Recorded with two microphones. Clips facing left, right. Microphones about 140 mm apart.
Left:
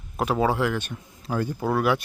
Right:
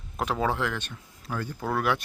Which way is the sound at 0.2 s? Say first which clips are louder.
Left 4 dB; 5° left (ahead or behind).